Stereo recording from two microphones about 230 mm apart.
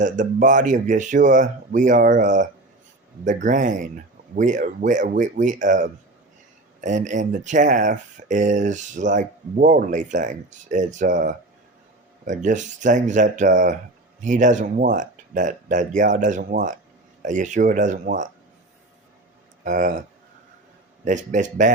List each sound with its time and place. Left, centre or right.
0.0 s speech: right
19.6 s speech: right